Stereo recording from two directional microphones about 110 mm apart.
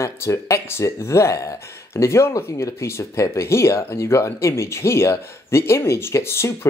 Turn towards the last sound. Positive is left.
turn(degrees=25)  # may be behind; listen again after turning